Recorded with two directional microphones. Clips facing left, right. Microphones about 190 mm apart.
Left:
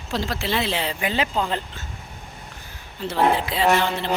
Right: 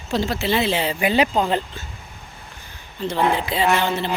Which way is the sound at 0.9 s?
15° right (ahead or behind).